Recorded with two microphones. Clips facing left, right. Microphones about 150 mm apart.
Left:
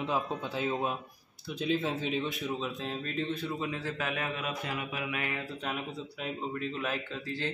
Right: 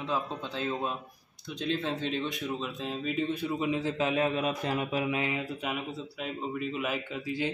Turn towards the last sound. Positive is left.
turn(degrees=-15)  # may be behind; listen again after turning